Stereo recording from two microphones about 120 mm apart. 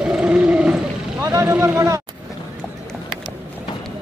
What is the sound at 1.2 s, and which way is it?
Vehicle, 25° right (ahead or behind).